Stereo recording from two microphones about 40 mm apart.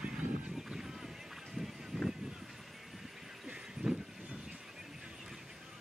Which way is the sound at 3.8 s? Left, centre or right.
Right.